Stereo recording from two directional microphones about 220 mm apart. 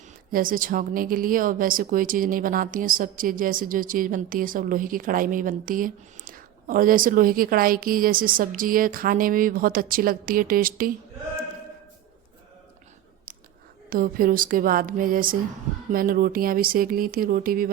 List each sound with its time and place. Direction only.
0.3 s speech: 40° right (ahead or behind)
13.9 s speech: 40° right (ahead or behind)